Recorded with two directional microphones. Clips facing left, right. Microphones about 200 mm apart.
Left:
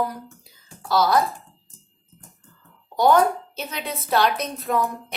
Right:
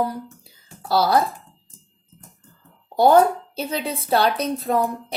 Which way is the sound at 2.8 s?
35° right (ahead or behind).